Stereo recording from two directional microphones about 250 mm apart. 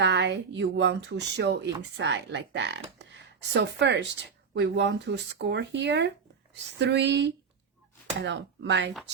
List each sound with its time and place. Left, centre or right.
0.0 s speech: right